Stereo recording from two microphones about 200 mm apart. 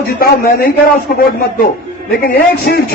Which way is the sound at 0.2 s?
50° left (ahead or behind).